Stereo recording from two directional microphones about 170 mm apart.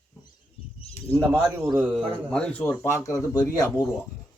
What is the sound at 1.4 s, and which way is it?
A man's voice, 5° right (ahead or behind).